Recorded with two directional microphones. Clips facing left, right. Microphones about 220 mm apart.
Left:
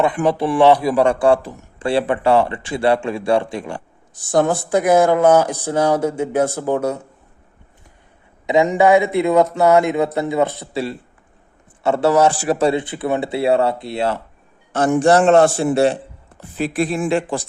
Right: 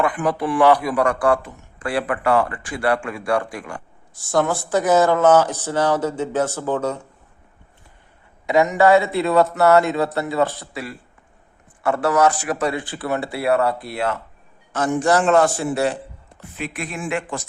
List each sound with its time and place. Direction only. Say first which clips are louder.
0.0 s a man's voice: left 4 dB; 25° left (ahead or behind)
8.4 s a man's voice: left 2 dB; 25° left (ahead or behind)